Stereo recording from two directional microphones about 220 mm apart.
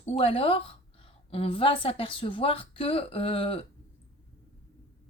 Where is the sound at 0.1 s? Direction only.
25° left (ahead or behind).